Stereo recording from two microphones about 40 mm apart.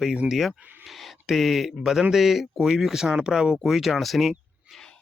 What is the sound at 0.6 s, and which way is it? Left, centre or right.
Speech, right.